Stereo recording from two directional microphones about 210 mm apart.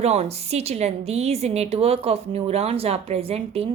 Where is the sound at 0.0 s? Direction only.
30° right (ahead or behind).